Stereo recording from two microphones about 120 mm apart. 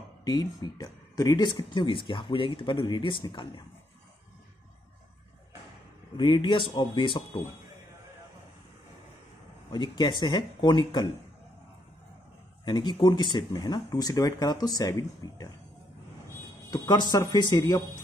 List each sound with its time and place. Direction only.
0.2 s speech: 35° left (ahead or behind)
6.1 s speech: 40° left (ahead or behind)
9.7 s speech: 40° left (ahead or behind)
12.6 s speech: 40° left (ahead or behind)
16.7 s speech: 35° left (ahead or behind)